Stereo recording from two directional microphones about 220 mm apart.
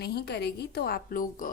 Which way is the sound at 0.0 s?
45° left (ahead or behind).